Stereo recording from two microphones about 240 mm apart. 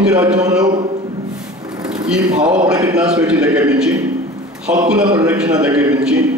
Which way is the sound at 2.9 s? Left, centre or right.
Centre.